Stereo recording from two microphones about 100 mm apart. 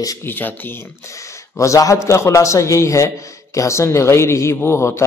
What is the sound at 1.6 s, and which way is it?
A man's voice, 35° left (ahead or behind).